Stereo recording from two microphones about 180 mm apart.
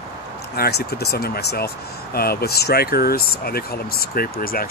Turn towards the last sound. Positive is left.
turn(degrees=55)  # may be behind; listen again after turning